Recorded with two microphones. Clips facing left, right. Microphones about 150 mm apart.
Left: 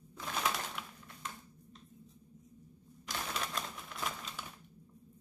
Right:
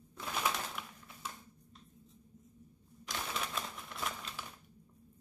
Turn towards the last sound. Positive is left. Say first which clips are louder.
# even
turn(degrees=0)  # may be behind; listen again after turning